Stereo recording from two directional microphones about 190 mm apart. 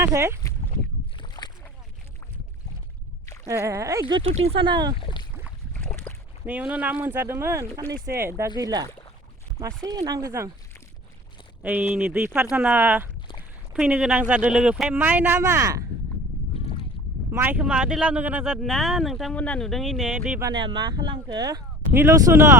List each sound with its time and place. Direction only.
0.0 s speech: 15° right (ahead or behind)
1.2 s boat: 25° left (ahead or behind)
3.4 s speech: 15° right (ahead or behind)
4.1 s speech: 30° right (ahead or behind)
4.9 s boat: 25° left (ahead or behind)
5.7 s boat: 10° left (ahead or behind)
6.4 s speech: 5° right (ahead or behind)
11.6 s speech: 10° right (ahead or behind)
17.3 s speech: 10° right (ahead or behind)
20.4 s speech: 25° right (ahead or behind)